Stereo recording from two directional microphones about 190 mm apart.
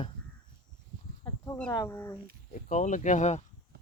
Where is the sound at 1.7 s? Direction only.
15° left (ahead or behind).